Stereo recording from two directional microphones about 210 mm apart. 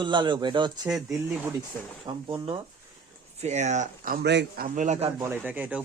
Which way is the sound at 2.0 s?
20° right (ahead or behind).